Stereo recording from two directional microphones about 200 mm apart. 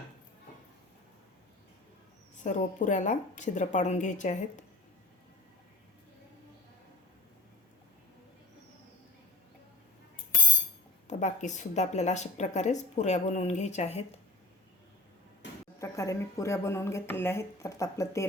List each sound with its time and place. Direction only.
2.4 s a woman's voice: 40° left (ahead or behind)
11.1 s a woman's voice: 35° left (ahead or behind)
15.4 s a sound: 60° left (ahead or behind)
15.8 s speech: 15° left (ahead or behind)